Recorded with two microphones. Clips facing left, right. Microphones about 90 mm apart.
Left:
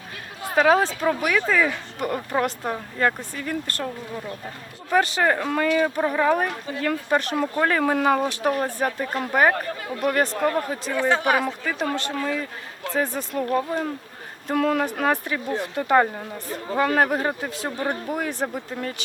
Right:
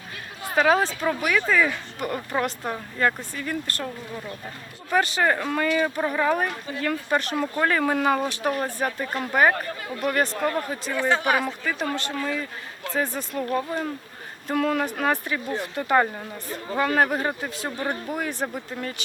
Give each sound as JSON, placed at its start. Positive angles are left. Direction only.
{"t": 0.4, "sound": "speech", "side_deg": 90}
{"t": 3.3, "sound": "speech", "side_deg": 85}
{"t": 3.8, "sound": "speech", "side_deg": 45}
{"t": 5.1, "sound": "speech", "side_deg": 75}
{"t": 6.0, "sound": "speech", "side_deg": 60}
{"t": 13.5, "sound": "speech", "side_deg": 70}
{"t": 14.4, "sound": "speech", "side_deg": 85}
{"t": 16.7, "sound": "speech", "side_deg": 90}
{"t": 17.7, "sound": "speech", "side_deg": 90}
{"t": 18.3, "sound": "speech", "side_deg": 40}